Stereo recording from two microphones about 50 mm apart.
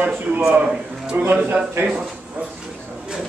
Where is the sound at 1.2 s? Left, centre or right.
Right.